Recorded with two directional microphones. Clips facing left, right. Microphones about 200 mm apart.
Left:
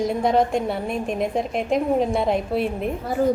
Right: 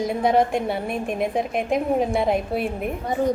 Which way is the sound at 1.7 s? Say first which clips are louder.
Left 1 dB; 5° right (ahead or behind).